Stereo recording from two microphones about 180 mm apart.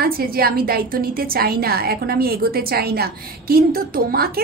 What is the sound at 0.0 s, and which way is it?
A woman's voice, 55° right (ahead or behind).